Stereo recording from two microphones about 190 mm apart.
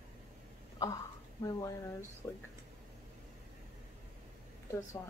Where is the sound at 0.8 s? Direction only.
20° left (ahead or behind).